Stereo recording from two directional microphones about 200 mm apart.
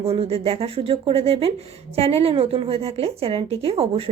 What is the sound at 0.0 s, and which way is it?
A woman's voice, 30° right (ahead or behind).